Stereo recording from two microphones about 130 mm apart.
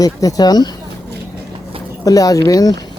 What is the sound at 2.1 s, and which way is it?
Speech, 25° left (ahead or behind).